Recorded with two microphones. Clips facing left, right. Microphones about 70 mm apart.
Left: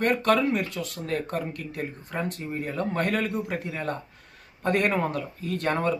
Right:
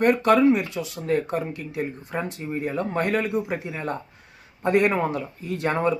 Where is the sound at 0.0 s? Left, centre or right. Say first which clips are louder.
Right 5 dB; centre.